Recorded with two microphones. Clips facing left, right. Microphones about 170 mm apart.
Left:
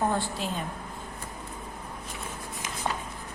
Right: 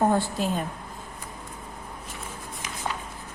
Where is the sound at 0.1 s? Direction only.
45° right (ahead or behind).